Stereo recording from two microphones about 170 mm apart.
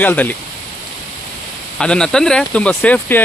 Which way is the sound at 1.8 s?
5° left (ahead or behind).